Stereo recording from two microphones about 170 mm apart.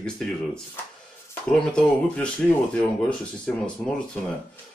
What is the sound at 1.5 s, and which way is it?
Speech, 5° left (ahead or behind).